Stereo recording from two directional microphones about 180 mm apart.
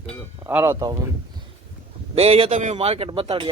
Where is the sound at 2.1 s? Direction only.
35° right (ahead or behind).